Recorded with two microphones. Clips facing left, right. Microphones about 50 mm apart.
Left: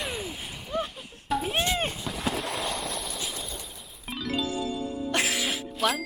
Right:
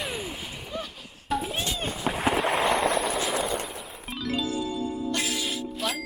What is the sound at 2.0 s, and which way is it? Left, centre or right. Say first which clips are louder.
Boat: right 5 dB; right.